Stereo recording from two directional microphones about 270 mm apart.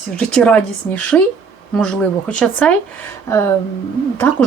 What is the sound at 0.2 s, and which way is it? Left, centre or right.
Speech, centre.